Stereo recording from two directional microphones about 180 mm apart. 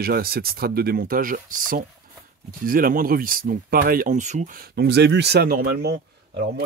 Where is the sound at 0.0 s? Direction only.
55° right (ahead or behind).